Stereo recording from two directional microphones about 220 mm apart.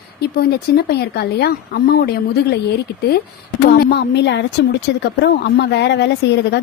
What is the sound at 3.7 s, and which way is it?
A woman's voice, 45° left (ahead or behind).